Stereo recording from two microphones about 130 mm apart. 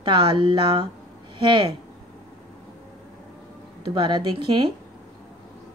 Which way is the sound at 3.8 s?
35° right (ahead or behind).